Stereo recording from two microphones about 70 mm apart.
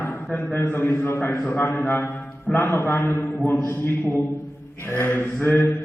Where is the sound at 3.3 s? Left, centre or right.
Left.